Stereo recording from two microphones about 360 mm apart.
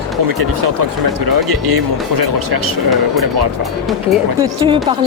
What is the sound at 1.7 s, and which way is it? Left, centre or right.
Speech, right.